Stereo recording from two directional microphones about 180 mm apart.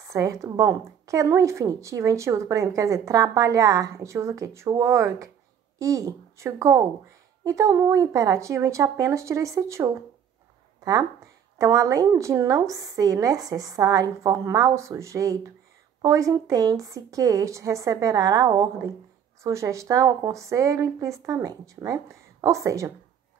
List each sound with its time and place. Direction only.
0.1 s a woman's voice: 15° right (ahead or behind)